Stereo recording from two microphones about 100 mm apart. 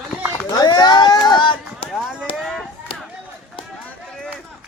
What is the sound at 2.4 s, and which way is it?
Chop, 5° left (ahead or behind).